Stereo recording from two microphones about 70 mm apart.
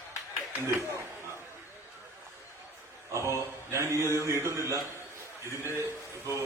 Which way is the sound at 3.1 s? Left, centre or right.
Right.